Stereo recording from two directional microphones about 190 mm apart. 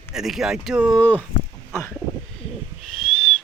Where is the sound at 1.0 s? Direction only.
10° left (ahead or behind).